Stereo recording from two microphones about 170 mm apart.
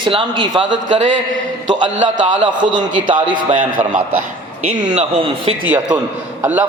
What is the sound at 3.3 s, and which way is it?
Speech, 50° right (ahead or behind).